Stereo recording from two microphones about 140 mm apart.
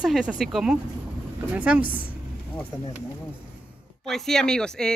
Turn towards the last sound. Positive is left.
turn(degrees=5)  # may be behind; listen again after turning